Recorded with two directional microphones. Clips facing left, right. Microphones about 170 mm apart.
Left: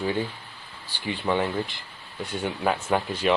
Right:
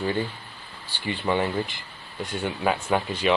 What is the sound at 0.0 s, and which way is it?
Speech, 5° left (ahead or behind).